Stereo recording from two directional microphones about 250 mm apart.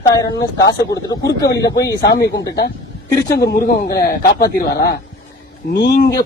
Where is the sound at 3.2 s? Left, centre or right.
Left.